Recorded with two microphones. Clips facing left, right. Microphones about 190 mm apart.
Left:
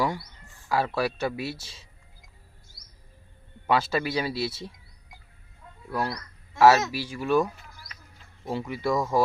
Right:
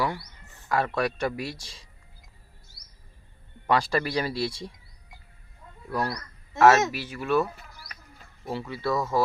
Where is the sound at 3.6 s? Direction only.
5° left (ahead or behind).